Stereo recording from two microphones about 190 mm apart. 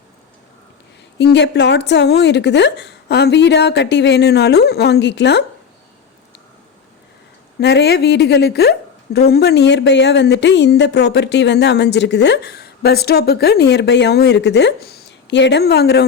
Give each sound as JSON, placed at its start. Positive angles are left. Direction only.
{"t": 1.2, "sound": "speech", "side_deg": 65}
{"t": 7.6, "sound": "speech", "side_deg": 60}